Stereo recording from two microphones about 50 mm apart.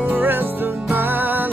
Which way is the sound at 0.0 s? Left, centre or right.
Right.